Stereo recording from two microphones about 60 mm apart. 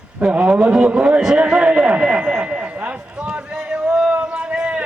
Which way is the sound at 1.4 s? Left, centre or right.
Centre.